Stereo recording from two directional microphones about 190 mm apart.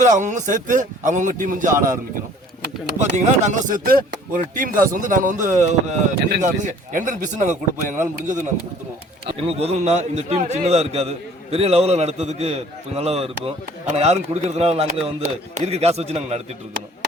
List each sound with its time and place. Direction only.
0.0 s a man's voice: 40° right (ahead or behind)
3.0 s a man's voice: 40° right (ahead or behind)